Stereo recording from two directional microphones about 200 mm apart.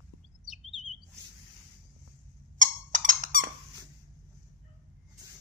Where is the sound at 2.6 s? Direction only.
40° right (ahead or behind).